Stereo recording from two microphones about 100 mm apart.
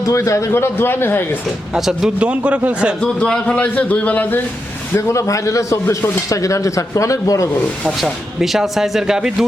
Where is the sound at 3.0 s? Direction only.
10° left (ahead or behind).